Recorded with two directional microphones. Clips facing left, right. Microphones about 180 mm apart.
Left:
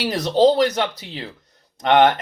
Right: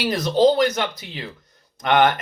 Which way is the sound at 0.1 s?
35° left (ahead or behind).